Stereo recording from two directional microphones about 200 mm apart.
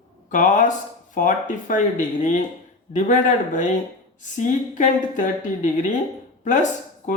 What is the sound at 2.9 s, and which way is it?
A woman's voice, 35° left (ahead or behind).